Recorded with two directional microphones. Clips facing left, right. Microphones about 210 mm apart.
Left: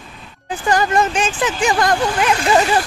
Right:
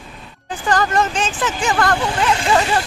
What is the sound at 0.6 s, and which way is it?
Speech, 10° left (ahead or behind).